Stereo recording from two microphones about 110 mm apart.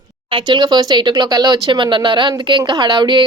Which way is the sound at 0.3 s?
45° right (ahead or behind).